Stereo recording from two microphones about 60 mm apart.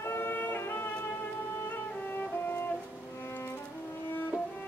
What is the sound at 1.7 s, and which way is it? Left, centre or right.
Music, left.